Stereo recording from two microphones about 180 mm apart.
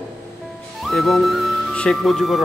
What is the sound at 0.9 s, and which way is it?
Speech, centre (ahead or behind).